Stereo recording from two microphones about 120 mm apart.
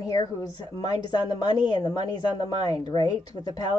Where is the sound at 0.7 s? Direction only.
35° left (ahead or behind).